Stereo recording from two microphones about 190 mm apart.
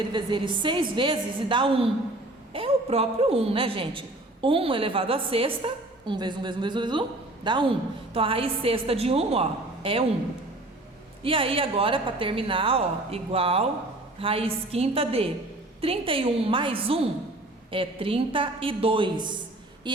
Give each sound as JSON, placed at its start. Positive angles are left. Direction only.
{"t": 0.0, "sound": "a man's voice", "side_deg": -25}
{"t": 11.2, "sound": "a man's voice", "side_deg": -30}